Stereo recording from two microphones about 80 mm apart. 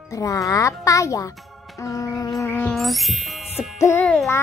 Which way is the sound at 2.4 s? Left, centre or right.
Left.